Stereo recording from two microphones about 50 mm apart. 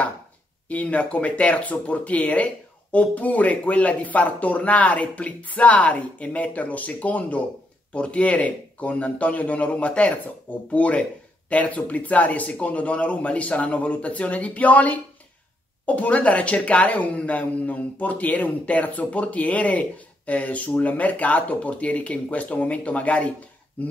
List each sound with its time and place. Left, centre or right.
0.7 s speech: left